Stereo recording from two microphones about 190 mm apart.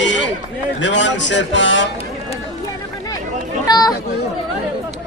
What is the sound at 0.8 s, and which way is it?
Speech, 70° left (ahead or behind).